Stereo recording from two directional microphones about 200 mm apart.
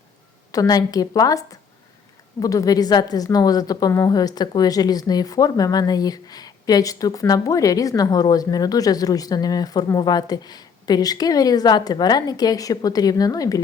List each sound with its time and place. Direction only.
0.5 s a woman's voice: 20° left (ahead or behind)